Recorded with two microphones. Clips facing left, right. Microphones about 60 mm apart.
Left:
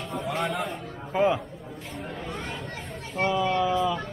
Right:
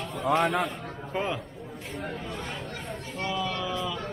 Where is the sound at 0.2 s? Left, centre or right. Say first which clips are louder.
Right 5 dB; right.